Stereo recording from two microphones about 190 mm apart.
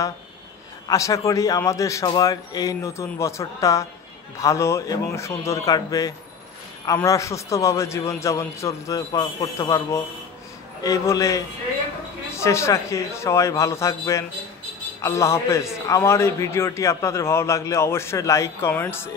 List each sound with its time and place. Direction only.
0.8 s a man's voice: 15° left (ahead or behind)